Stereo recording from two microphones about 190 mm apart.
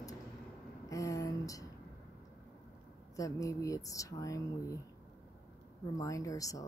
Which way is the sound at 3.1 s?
15° left (ahead or behind).